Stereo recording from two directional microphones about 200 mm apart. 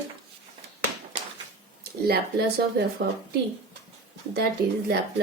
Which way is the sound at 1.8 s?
50° right (ahead or behind).